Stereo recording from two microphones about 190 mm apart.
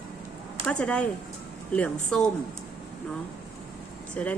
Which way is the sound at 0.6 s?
5° left (ahead or behind).